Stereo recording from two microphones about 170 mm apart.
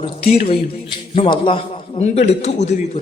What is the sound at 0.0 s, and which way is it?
Speech, 35° left (ahead or behind).